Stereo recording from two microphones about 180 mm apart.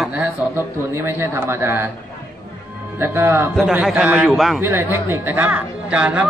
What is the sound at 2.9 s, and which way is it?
Speech, 10° right (ahead or behind).